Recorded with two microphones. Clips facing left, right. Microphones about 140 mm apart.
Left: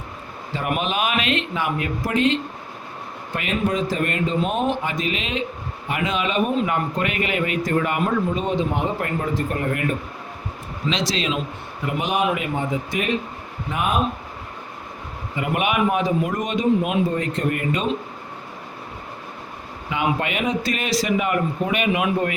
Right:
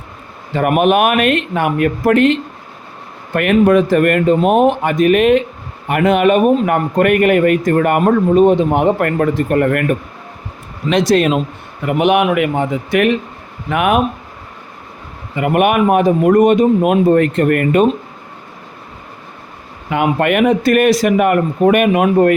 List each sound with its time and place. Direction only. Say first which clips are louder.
0.5 s speech: right 12 dB; 60° right (ahead or behind)
11.9 s speech: right 9 dB; 65° right (ahead or behind)
15.4 s speech: right 9 dB; 55° right (ahead or behind)
19.9 s speech: right 9 dB; 55° right (ahead or behind)